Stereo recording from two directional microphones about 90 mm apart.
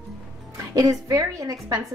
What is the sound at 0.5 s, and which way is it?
A woman's voice, 40° right (ahead or behind).